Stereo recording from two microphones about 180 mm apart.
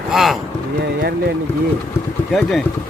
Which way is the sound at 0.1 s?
Centre (ahead or behind).